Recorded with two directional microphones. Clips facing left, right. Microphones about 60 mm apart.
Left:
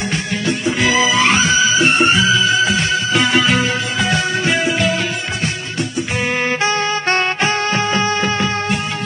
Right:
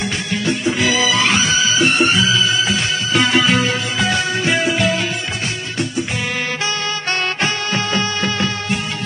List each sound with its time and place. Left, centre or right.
0.9 s music: left
6.3 s music: left